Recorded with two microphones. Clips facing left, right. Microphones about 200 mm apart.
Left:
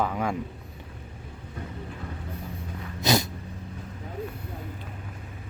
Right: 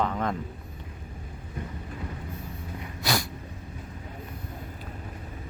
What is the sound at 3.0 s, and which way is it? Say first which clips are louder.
Cat: left 5 dB; 20° left (ahead or behind).